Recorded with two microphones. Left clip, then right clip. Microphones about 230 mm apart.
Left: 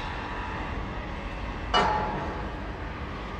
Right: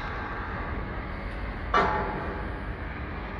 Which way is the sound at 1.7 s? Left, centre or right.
Left.